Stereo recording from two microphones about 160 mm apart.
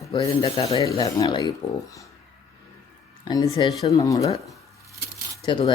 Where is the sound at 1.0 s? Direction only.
25° left (ahead or behind).